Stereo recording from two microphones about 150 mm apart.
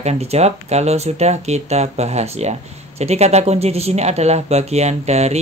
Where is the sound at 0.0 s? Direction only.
45° right (ahead or behind).